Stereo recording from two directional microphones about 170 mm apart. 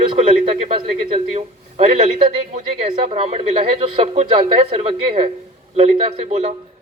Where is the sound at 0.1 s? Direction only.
35° right (ahead or behind).